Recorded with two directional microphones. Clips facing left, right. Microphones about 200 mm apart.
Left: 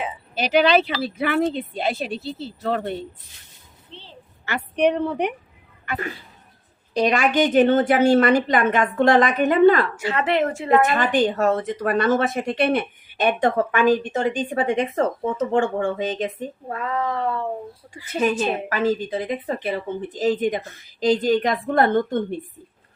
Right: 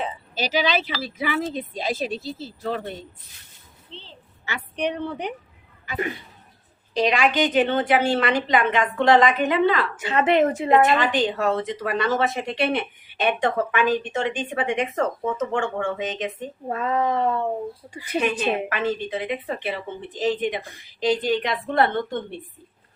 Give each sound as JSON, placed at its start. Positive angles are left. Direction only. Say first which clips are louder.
{"t": 0.3, "sound": "speech", "louder": "left 6 dB", "side_deg": 55}
{"t": 4.4, "sound": "speech", "louder": "left 7 dB", "side_deg": 60}
{"t": 6.9, "sound": "speech", "louder": "left 2 dB", "side_deg": 45}
{"t": 10.0, "sound": "speech", "louder": "right 2 dB", "side_deg": -20}
{"t": 10.9, "sound": "speech", "louder": "left 2 dB", "side_deg": 45}
{"t": 16.6, "sound": "a woman's voice", "louder": "right 3 dB", "side_deg": -25}
{"t": 18.2, "sound": "a woman's voice", "louder": "left 2 dB", "side_deg": 40}